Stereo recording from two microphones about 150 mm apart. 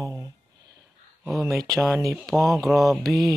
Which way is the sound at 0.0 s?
25° right (ahead or behind).